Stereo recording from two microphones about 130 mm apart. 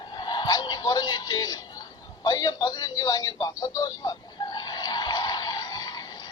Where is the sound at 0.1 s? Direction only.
35° left (ahead or behind).